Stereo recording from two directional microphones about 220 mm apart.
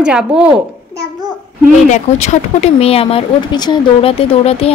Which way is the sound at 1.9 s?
30° left (ahead or behind).